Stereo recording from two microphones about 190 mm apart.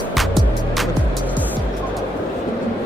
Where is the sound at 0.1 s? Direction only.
Centre (ahead or behind).